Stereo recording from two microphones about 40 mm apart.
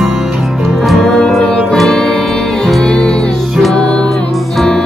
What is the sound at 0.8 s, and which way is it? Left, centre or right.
Music, centre.